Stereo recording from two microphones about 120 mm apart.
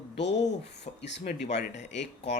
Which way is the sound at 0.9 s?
90° left.